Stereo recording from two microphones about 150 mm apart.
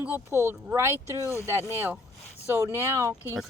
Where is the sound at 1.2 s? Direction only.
20° left (ahead or behind).